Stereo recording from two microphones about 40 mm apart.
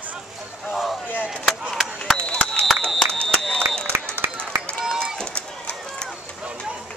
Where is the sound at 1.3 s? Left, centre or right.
Centre.